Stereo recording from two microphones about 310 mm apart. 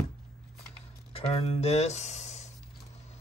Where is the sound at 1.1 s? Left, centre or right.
Centre.